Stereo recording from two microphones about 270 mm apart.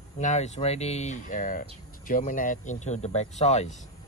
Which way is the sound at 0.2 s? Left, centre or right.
Left.